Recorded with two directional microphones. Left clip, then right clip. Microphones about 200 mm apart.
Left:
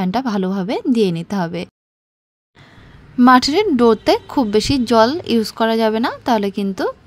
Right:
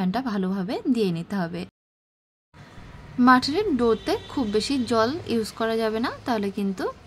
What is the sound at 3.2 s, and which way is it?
Speech, 35° left (ahead or behind).